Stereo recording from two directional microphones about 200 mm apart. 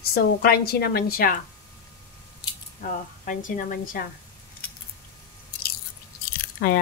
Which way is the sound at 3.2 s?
40° left (ahead or behind).